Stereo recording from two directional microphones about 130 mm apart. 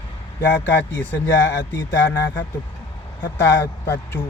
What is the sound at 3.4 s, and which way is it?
Speech, 20° left (ahead or behind).